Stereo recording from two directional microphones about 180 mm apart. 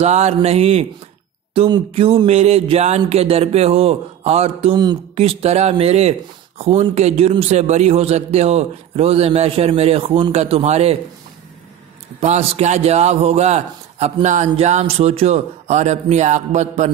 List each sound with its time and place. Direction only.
0.0 s a man's voice: 40° right (ahead or behind)
12.2 s a man's voice: 35° right (ahead or behind)